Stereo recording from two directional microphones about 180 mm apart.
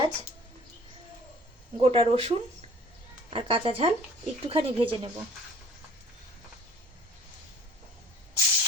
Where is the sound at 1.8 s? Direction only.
35° right (ahead or behind).